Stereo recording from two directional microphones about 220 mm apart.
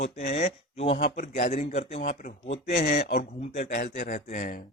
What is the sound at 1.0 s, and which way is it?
Speech, 35° left (ahead or behind).